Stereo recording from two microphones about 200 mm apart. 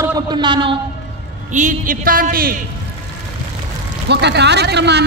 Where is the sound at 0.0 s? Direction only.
20° right (ahead or behind).